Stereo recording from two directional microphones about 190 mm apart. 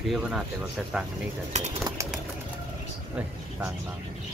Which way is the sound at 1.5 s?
35° right (ahead or behind).